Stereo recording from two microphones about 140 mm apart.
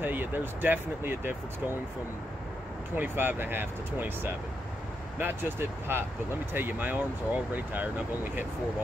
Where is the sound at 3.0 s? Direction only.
15° right (ahead or behind).